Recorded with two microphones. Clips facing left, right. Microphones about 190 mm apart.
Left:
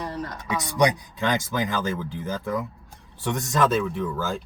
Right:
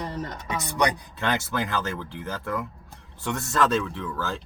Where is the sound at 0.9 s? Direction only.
15° left (ahead or behind).